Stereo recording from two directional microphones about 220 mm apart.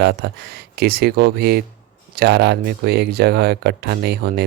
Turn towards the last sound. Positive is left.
turn(degrees=-45)  # may be behind; listen again after turning